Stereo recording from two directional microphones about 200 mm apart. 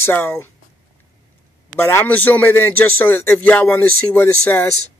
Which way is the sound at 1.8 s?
10° left (ahead or behind).